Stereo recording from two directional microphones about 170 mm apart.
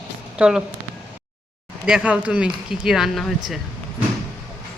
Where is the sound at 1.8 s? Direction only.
5° right (ahead or behind).